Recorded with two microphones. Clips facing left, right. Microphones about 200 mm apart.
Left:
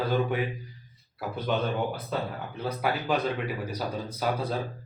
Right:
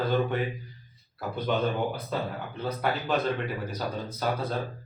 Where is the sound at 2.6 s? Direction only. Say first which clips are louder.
Left 1 dB; 10° left (ahead or behind).